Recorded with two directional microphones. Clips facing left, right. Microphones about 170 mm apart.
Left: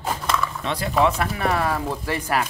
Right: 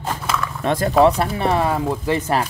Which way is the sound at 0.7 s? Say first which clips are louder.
Right 10 dB; 45° right (ahead or behind).